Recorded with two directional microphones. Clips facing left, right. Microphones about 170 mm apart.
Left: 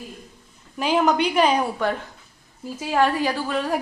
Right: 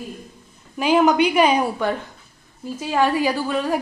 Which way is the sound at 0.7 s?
5° right (ahead or behind).